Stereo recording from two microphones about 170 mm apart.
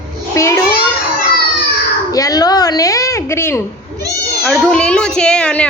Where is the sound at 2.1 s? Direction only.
20° left (ahead or behind).